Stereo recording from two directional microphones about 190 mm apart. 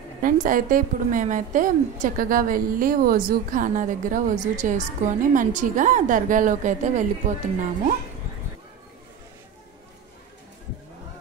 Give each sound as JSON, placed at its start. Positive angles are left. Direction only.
{"t": 0.2, "sound": "a woman's voice", "side_deg": -45}